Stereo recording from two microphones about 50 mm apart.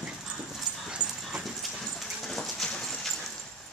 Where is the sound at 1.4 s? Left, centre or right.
Centre.